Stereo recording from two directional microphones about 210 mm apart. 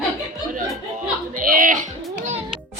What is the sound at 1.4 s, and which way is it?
Speech, 40° right (ahead or behind).